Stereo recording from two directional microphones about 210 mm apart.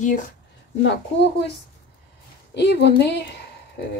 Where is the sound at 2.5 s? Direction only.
55° left (ahead or behind).